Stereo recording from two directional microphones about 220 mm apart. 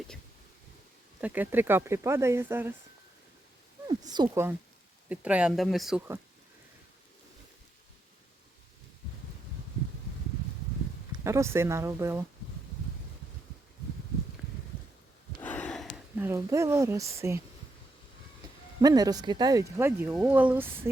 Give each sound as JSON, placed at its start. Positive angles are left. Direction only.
{"t": 1.2, "sound": "speech", "side_deg": -10}
{"t": 3.8, "sound": "speech", "side_deg": -20}
{"t": 11.2, "sound": "speech", "side_deg": -15}
{"t": 15.4, "sound": "a sound", "side_deg": 5}
{"t": 16.1, "sound": "speech", "side_deg": -10}
{"t": 18.8, "sound": "speech", "side_deg": -15}